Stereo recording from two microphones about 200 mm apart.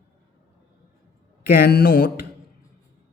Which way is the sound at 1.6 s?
50° left (ahead or behind).